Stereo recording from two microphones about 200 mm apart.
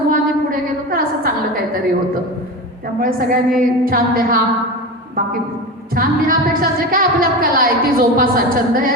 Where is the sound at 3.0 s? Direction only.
45° right (ahead or behind).